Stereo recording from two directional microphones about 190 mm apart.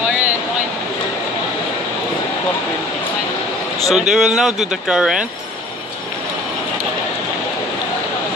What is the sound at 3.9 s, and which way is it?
Speech, 5° right (ahead or behind).